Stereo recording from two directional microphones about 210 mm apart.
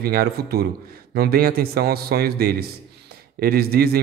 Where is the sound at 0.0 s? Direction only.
45° right (ahead or behind).